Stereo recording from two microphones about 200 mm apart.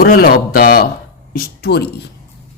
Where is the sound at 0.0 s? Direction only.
45° left (ahead or behind).